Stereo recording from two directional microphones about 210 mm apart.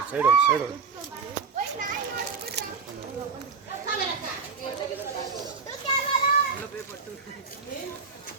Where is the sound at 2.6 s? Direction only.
55° right (ahead or behind).